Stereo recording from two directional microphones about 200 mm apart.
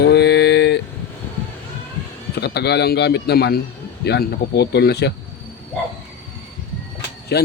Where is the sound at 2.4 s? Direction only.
55° left (ahead or behind).